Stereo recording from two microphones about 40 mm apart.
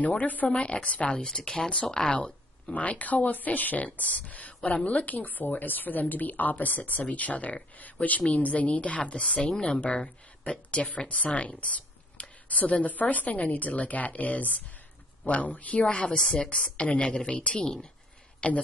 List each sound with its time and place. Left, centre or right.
0.2 s speech: left
0.5 s speech: left
1.2 s a woman's voice: centre
2.6 s a woman's voice: left; by 17.8 s centre
18.4 s speech: left